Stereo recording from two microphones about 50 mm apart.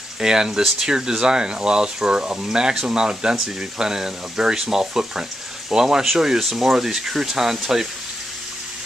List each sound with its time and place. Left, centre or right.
0.2 s speech: centre